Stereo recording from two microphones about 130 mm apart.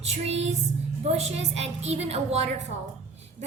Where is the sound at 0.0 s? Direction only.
55° right (ahead or behind).